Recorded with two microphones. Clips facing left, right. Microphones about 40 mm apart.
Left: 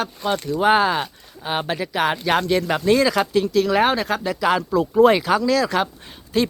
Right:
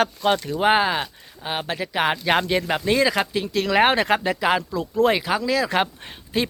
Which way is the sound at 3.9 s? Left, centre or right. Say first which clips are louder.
Right 2 dB; right.